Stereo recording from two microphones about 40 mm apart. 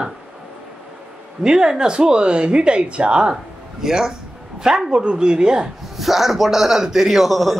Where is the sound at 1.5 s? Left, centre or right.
Centre.